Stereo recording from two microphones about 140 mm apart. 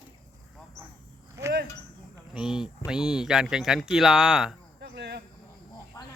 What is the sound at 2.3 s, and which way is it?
Speech, 5° right (ahead or behind).